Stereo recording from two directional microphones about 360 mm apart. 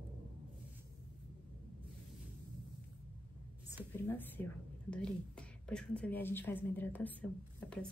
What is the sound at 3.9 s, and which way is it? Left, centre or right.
Speech, centre.